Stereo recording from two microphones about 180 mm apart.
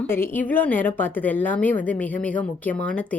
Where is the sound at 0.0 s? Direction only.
10° left (ahead or behind).